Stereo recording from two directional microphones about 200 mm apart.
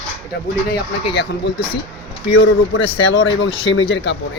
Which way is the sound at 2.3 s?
70° left (ahead or behind).